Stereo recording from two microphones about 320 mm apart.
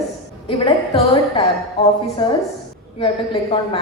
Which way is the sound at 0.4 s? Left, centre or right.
Centre.